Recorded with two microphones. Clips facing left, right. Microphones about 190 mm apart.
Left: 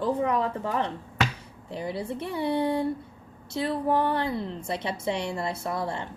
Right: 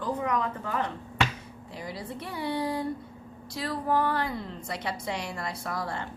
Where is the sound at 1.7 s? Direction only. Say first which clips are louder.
Left 6 dB; 30° left (ahead or behind).